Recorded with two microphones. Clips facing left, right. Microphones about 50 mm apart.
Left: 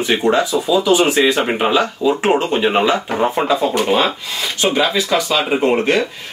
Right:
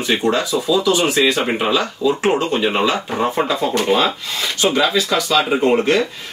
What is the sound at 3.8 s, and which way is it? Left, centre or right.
Speech, centre.